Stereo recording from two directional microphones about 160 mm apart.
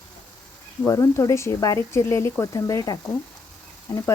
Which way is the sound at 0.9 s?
20° left (ahead or behind).